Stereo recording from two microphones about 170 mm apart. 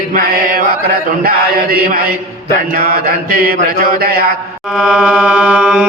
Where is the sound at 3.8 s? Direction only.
65° right (ahead or behind).